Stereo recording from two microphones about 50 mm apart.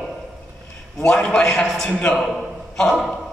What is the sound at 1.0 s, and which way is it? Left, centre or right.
Speech, centre.